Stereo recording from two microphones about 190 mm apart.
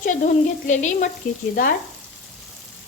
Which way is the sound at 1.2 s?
45° left (ahead or behind).